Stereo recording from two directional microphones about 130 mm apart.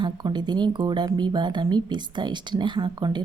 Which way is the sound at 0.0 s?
35° right (ahead or behind).